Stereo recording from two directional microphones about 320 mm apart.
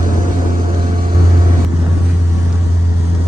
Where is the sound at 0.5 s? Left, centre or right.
Right.